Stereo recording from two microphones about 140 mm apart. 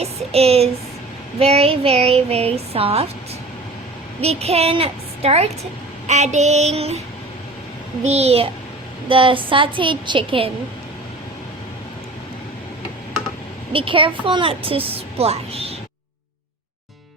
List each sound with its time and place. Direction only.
0.0 s a sound: 45° right (ahead or behind)
1.4 s speech: 45° right (ahead or behind)
4.2 s speech: 50° right (ahead or behind)
6.1 s a sound: 55° right (ahead or behind)
8.0 s a woman's voice: 50° right (ahead or behind)
13.7 s a woman's voice: 40° right (ahead or behind)